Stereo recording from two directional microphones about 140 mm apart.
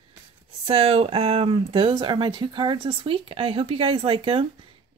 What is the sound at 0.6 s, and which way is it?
Speech, 45° right (ahead or behind).